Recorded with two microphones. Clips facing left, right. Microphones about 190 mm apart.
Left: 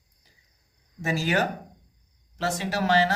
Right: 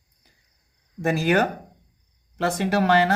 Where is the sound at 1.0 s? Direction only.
55° right (ahead or behind).